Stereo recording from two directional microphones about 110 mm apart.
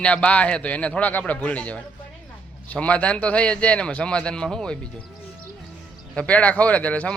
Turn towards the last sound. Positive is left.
turn(degrees=10)  # may be behind; listen again after turning